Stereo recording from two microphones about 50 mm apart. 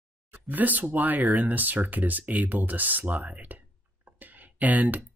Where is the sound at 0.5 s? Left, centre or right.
Right.